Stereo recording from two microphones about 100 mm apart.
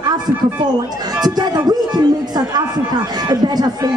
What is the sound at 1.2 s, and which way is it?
Speech, 45° right (ahead or behind).